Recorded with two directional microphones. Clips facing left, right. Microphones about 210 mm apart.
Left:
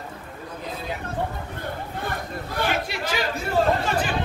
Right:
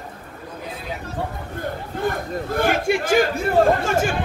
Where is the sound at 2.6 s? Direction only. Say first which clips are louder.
Right 6 dB; 50° right (ahead or behind).